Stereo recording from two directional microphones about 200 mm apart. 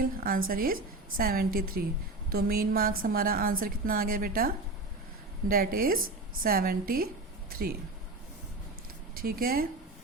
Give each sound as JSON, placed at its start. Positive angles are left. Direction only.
{"t": 0.0, "sound": "a woman's voice", "side_deg": -45}
{"t": 9.1, "sound": "a woman's voice", "side_deg": -45}